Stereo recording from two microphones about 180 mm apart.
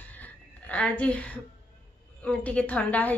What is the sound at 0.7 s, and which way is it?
A woman's voice, 5° left (ahead or behind).